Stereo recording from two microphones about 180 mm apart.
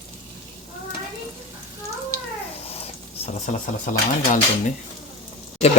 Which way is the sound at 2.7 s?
35° left (ahead or behind).